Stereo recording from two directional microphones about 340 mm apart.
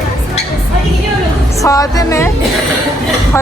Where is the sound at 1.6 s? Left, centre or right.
Centre.